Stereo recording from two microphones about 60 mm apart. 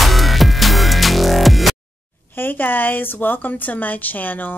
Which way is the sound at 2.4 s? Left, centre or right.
Left.